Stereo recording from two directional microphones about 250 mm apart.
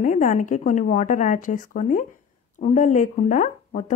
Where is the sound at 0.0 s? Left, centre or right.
Left.